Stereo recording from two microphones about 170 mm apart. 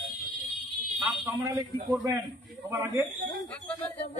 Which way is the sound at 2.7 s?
10° right (ahead or behind).